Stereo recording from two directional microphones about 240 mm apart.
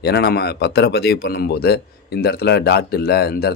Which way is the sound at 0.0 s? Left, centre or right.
Left.